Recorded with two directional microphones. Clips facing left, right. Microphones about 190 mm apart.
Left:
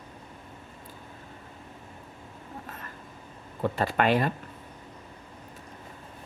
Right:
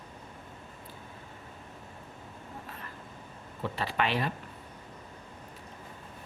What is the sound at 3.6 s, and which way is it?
Speech, 45° left (ahead or behind).